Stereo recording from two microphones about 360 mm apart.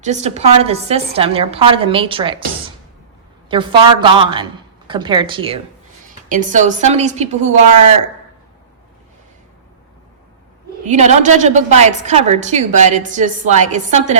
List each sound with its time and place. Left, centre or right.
0.0 s a woman's voice: centre
3.5 s a woman's voice: centre
10.8 s a woman's voice: centre